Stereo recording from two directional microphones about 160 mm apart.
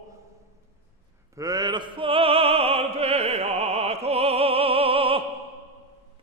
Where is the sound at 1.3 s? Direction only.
20° right (ahead or behind).